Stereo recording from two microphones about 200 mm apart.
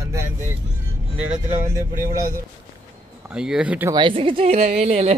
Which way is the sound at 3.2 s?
5° right (ahead or behind).